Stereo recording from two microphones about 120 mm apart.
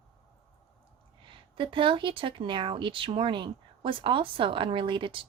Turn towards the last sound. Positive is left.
turn(degrees=-45)  # may be behind; listen again after turning